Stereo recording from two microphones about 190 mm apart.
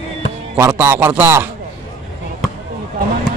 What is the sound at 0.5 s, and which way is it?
Speech, 10° right (ahead or behind).